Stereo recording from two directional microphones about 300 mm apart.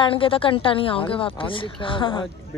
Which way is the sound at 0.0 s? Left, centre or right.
Centre.